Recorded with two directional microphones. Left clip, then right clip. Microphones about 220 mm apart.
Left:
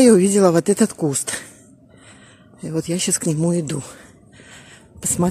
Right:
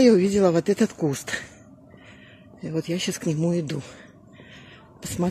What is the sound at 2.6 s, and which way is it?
Speech, 25° left (ahead or behind).